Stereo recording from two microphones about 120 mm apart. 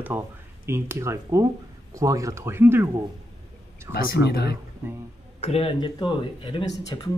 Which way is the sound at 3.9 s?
25° right (ahead or behind).